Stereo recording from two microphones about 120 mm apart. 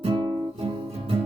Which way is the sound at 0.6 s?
50° right (ahead or behind).